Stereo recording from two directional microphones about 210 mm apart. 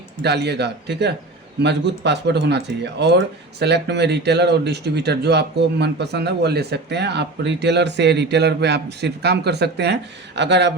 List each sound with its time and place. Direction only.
0.2 s speech: 50° right (ahead or behind)